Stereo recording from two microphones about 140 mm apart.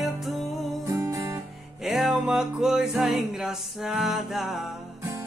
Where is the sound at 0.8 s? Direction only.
20° right (ahead or behind).